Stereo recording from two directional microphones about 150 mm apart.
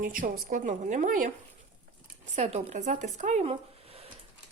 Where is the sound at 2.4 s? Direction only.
45° right (ahead or behind).